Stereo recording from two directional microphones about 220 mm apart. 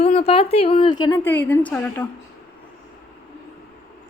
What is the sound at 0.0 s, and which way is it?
A woman's voice, 25° left (ahead or behind).